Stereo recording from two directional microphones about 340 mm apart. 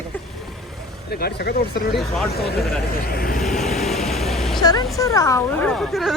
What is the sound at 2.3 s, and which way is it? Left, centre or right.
Speech, left.